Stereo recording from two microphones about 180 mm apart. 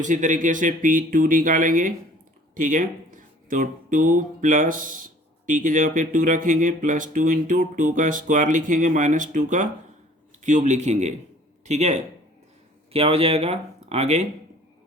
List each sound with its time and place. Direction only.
0.0 s speech: 45° right (ahead or behind)